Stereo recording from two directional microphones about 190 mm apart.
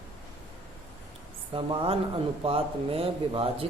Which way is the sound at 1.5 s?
30° right (ahead or behind).